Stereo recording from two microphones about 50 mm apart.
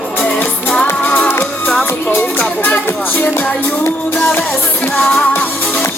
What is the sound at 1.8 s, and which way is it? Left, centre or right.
Music, left.